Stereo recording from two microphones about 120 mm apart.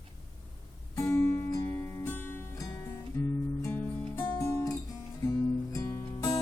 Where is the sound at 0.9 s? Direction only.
25° left (ahead or behind).